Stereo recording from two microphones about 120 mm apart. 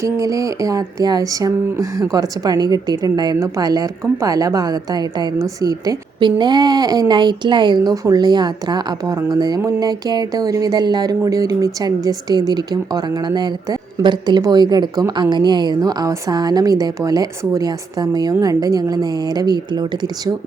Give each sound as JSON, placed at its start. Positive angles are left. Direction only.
{"t": 0.0, "sound": "speech", "side_deg": -25}